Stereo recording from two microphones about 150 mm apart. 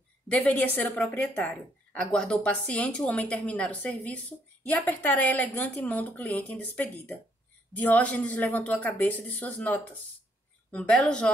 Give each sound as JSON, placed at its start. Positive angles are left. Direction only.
{"t": 0.3, "sound": "a woman's voice", "side_deg": 10}